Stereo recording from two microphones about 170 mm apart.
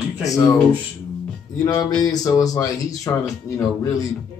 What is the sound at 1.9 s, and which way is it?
Speech, 20° left (ahead or behind).